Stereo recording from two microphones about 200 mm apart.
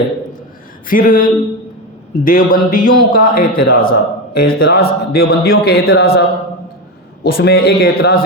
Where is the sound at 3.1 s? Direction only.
45° left (ahead or behind).